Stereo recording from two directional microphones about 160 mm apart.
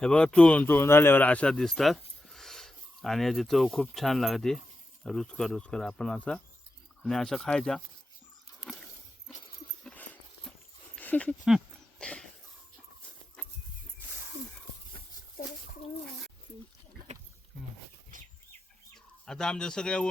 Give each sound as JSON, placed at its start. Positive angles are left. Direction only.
{"t": 0.0, "sound": "speech", "side_deg": 5}
{"t": 9.8, "sound": "horse", "side_deg": 10}
{"t": 10.9, "sound": "a sound", "side_deg": 10}
{"t": 17.1, "sound": "rowboat", "side_deg": -45}
{"t": 19.2, "sound": "speech", "side_deg": 5}